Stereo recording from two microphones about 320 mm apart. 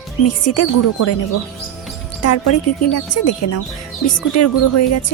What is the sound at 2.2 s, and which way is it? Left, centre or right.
A woman's voice, left.